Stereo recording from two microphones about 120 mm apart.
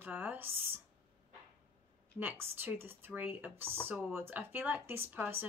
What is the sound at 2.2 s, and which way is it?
Speech, 15° right (ahead or behind).